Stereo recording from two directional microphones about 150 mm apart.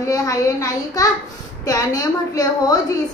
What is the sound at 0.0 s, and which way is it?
A woman's voice, 20° left (ahead or behind).